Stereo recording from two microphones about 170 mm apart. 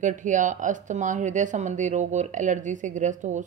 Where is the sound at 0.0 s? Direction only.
50° right (ahead or behind).